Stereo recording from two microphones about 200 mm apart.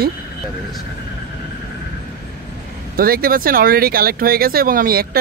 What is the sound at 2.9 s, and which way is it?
Speech, 50° right (ahead or behind).